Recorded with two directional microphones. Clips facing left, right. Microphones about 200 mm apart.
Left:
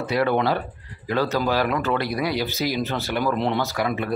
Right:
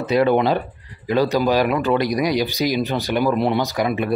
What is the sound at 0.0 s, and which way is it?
A man's voice, 20° right (ahead or behind).